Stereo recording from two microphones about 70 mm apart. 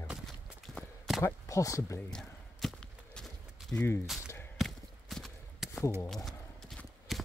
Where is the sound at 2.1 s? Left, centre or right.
Centre.